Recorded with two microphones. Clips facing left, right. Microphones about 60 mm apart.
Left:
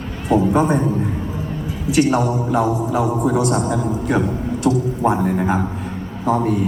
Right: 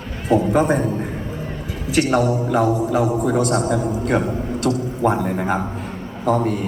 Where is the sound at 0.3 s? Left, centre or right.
Centre.